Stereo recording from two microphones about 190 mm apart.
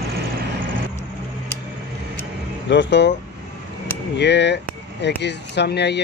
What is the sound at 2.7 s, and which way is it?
Speech, 70° left (ahead or behind).